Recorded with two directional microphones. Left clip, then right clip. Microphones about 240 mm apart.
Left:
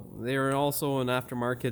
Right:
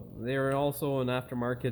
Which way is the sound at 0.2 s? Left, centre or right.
Left.